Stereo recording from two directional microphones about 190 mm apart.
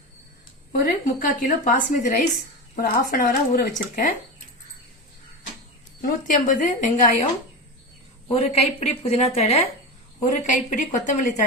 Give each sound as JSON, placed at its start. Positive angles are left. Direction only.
{"t": 0.7, "sound": "a woman's voice", "side_deg": 50}
{"t": 6.0, "sound": "speech", "side_deg": 45}
{"t": 8.3, "sound": "speech", "side_deg": 35}